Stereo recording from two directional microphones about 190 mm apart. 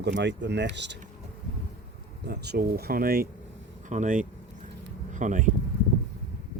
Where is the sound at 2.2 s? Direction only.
60° right (ahead or behind); by 5.5 s 40° right (ahead or behind).